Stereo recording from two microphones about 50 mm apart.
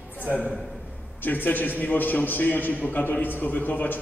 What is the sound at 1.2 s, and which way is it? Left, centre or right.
A man's voice, left.